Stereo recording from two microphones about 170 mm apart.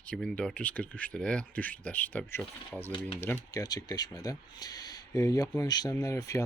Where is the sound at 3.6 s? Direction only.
20° left (ahead or behind).